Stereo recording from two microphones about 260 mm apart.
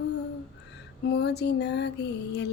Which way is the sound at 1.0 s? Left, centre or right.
Left.